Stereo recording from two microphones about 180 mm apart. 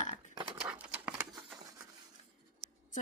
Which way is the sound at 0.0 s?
45° left (ahead or behind).